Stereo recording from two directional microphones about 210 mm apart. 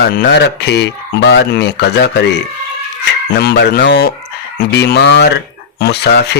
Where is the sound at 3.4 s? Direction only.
50° left (ahead or behind).